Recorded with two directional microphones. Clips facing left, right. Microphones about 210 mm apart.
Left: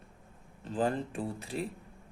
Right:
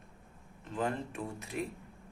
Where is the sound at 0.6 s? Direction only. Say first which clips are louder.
Left 4 dB; 30° left (ahead or behind).